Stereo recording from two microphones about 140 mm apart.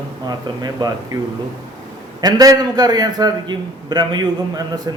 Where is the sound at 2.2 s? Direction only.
30° right (ahead or behind).